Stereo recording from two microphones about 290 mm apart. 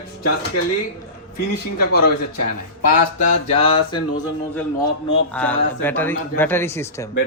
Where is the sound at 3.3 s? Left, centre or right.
Centre.